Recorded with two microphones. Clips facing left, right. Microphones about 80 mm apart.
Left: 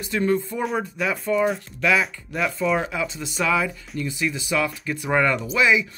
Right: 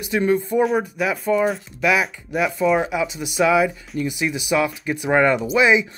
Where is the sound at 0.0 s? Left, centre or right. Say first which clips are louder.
Right 3 dB; centre.